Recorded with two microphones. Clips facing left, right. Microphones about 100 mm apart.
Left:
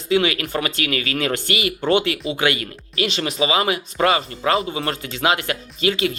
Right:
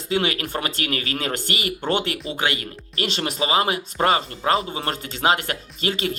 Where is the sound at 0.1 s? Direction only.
35° right (ahead or behind).